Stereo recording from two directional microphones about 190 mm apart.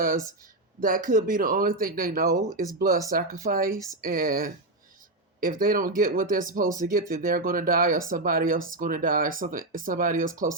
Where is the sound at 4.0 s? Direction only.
50° right (ahead or behind).